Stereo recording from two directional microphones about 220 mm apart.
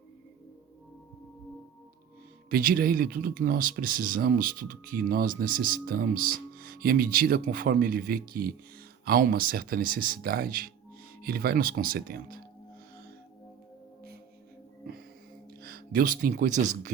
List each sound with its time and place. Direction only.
2.5 s speech: 40° right (ahead or behind)
15.6 s speech: 40° right (ahead or behind)